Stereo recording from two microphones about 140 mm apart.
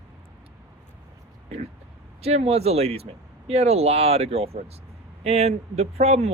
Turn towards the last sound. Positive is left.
turn(degrees=-50)  # may be behind; listen again after turning